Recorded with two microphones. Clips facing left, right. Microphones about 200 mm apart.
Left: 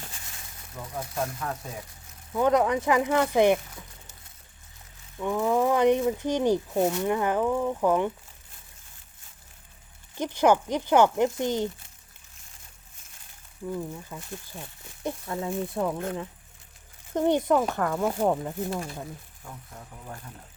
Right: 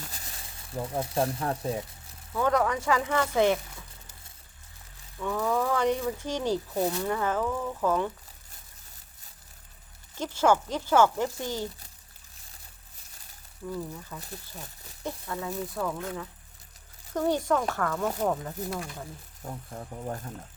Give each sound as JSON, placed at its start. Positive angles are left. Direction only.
{"t": 0.1, "sound": "snake", "side_deg": -35}
{"t": 2.3, "sound": "speech", "side_deg": 20}
{"t": 5.2, "sound": "speech", "side_deg": 15}
{"t": 10.2, "sound": "speech", "side_deg": 15}
{"t": 13.7, "sound": "speech", "side_deg": 15}
{"t": 17.2, "sound": "speech", "side_deg": 20}
{"t": 18.3, "sound": "speech", "side_deg": 25}
{"t": 19.4, "sound": "speech", "side_deg": -40}